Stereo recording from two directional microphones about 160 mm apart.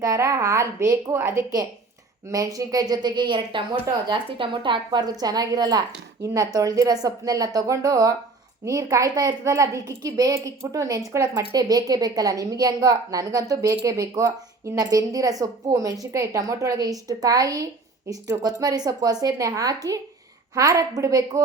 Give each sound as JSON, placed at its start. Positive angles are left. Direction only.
{"t": 0.0, "sound": "a woman's voice", "side_deg": -20}